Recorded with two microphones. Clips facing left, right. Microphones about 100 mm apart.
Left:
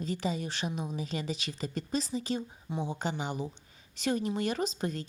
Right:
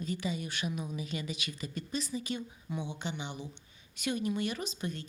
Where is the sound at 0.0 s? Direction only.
35° left (ahead or behind).